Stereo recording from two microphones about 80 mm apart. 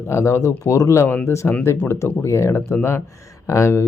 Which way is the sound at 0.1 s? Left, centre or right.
Left.